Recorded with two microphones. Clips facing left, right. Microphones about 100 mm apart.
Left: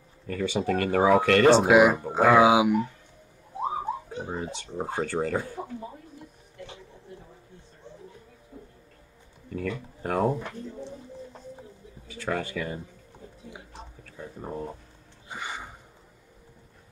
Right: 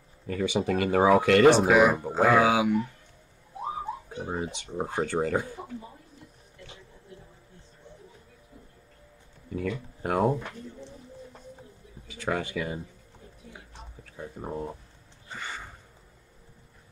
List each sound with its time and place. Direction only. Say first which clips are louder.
0.3 s speech: even; 15° right (ahead or behind)
1.7 s speech: left 2 dB; 15° left (ahead or behind)
3.5 s bird: left 4 dB; 30° left (ahead or behind)
4.3 s speech: right 3 dB; 20° right (ahead or behind)
9.5 s speech: even; 10° right (ahead or behind)
10.3 s speech: left 1 dB; 15° left (ahead or behind)
12.1 s speech: even; 15° right (ahead or behind)
14.1 s speech: right 1 dB; 10° right (ahead or behind)
15.2 s a sound: left 2 dB; 15° left (ahead or behind)